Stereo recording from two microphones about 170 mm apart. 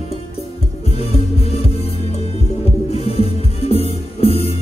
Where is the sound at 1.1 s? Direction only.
35° left (ahead or behind).